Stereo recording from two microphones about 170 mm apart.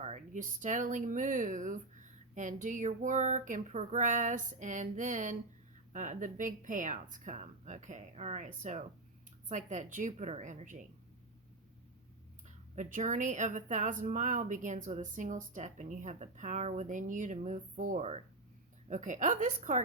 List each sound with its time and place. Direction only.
0.0 s a woman's voice: 45° right (ahead or behind)
12.7 s a woman's voice: 45° right (ahead or behind)